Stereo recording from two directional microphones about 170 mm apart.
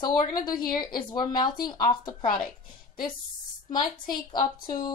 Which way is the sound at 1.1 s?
25° left (ahead or behind).